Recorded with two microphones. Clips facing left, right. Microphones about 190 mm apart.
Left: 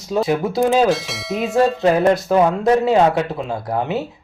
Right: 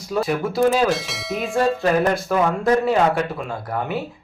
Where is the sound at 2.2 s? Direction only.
25° left (ahead or behind).